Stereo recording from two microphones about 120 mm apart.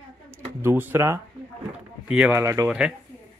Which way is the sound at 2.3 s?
25° right (ahead or behind).